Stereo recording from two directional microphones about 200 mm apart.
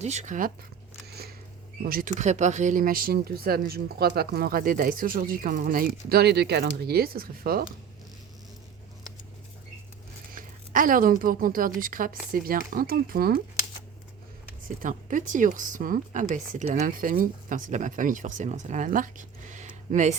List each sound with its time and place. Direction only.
0.0 s speech: 35° right (ahead or behind)
1.8 s speech: 45° right (ahead or behind)
10.3 s speech: 45° right (ahead or behind)
14.8 s speech: 40° right (ahead or behind)